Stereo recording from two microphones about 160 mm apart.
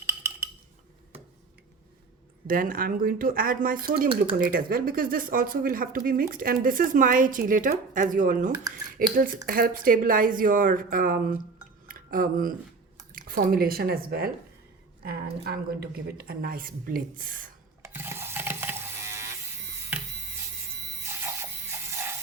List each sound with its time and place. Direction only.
0.0 s cutlery: 20° right (ahead or behind)
2.5 s speech: 60° right (ahead or behind)
11.9 s music: 60° right (ahead or behind)
13.0 s a woman's voice: 60° right (ahead or behind)
17.8 s mechanisms: 15° right (ahead or behind)
19.9 s electric shaver: 10° right (ahead or behind)
21.0 s music: 15° right (ahead or behind)